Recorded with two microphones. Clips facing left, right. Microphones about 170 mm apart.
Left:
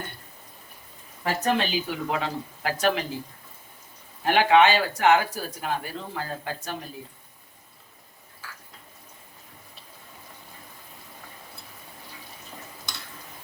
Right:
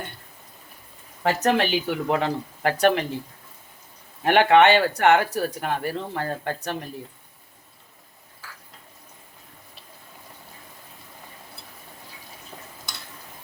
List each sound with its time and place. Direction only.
1.2 s speech: 80° right; by 3.1 s 60° right (ahead or behind)
4.3 s speech: 60° right (ahead or behind)